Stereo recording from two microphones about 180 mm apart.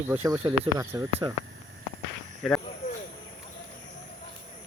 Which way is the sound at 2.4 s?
5° left (ahead or behind).